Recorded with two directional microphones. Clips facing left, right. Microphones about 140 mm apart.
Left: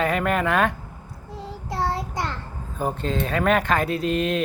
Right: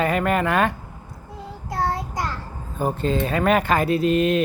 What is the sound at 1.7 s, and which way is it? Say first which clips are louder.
Child singing: right 1 dB; 25° left (ahead or behind).